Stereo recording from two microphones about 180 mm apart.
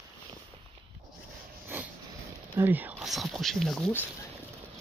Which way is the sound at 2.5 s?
10° right (ahead or behind).